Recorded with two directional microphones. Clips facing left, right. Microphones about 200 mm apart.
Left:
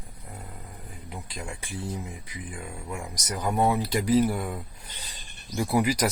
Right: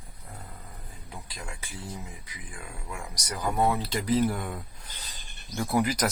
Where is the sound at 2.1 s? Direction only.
25° left (ahead or behind).